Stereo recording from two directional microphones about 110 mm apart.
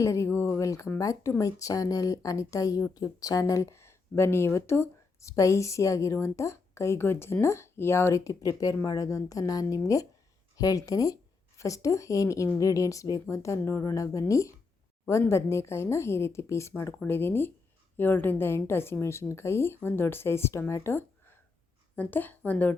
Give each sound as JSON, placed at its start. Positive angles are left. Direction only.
{"t": 0.0, "sound": "speech", "side_deg": 25}